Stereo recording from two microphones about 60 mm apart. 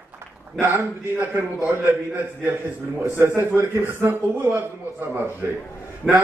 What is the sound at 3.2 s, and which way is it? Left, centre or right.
A man's voice, right.